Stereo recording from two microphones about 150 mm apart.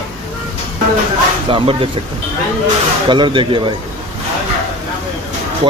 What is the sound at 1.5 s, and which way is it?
Speech, 35° right (ahead or behind).